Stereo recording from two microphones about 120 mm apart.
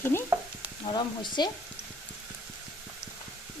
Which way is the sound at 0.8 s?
40° left (ahead or behind).